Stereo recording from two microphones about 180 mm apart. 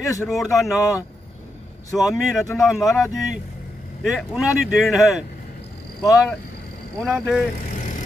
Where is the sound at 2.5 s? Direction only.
Centre (ahead or behind).